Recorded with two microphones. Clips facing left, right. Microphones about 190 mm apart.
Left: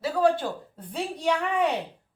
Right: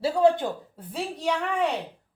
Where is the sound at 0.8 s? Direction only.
Centre (ahead or behind).